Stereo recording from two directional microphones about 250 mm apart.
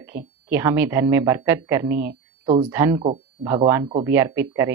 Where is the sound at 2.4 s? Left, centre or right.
Right.